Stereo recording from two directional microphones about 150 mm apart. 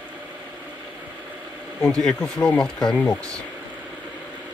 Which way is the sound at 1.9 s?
5° left (ahead or behind).